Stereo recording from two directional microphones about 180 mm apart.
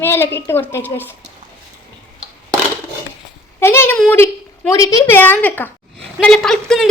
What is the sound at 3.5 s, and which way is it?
A woman's voice, 15° left (ahead or behind).